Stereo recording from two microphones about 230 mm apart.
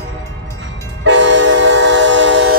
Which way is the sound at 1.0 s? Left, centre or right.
Right.